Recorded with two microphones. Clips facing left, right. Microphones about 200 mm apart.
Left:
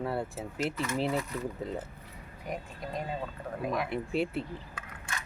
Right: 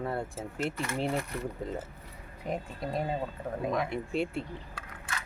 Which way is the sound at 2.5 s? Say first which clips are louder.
Right 3 dB; 30° right (ahead or behind).